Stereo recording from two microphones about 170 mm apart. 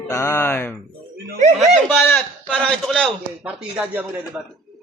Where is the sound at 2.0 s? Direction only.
10° left (ahead or behind).